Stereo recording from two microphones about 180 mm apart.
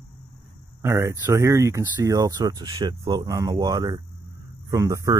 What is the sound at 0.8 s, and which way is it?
Speech, 15° right (ahead or behind).